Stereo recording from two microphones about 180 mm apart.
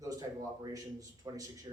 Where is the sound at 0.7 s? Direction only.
20° right (ahead or behind).